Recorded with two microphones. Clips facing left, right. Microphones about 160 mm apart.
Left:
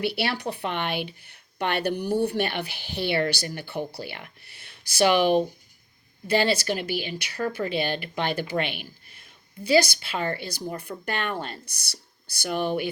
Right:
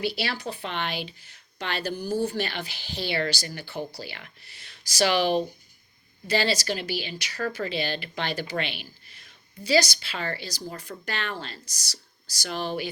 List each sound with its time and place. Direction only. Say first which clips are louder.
0.0 s a woman's voice: left 3 dB; 65° left (ahead or behind)